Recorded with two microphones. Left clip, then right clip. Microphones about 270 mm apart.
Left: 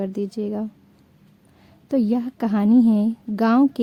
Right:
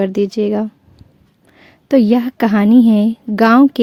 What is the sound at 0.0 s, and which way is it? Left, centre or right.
A woman's voice, right.